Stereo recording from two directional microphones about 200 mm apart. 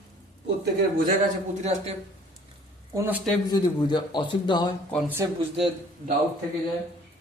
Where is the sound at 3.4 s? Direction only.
20° left (ahead or behind).